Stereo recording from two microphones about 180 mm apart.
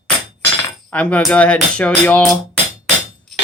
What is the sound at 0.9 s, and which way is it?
Speech, 5° left (ahead or behind).